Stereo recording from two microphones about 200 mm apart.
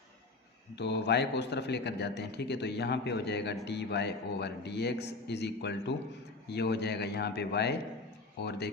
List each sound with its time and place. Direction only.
0.8 s a man's voice: 60° left (ahead or behind)